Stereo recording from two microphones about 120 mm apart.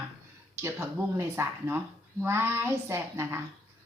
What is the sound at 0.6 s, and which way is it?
A woman's voice, 25° right (ahead or behind).